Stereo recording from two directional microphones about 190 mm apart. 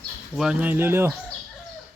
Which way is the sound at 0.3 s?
5° right (ahead or behind).